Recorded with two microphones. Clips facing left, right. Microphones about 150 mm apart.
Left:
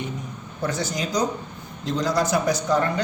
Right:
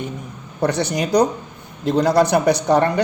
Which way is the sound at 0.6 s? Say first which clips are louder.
Right 7 dB; 70° right (ahead or behind).